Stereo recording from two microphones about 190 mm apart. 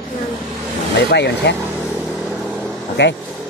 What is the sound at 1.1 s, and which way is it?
Speech, 65° left (ahead or behind).